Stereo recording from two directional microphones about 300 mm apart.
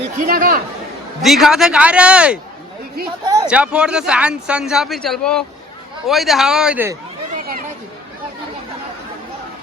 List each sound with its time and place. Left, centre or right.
0.2 s speech: right
1.2 s speech: centre
7.3 s run: right